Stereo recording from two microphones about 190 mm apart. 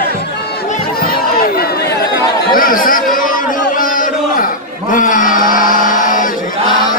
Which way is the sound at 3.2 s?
45° left (ahead or behind).